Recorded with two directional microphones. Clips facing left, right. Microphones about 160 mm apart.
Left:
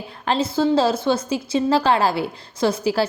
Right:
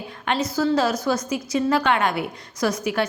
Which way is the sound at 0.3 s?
30° left (ahead or behind).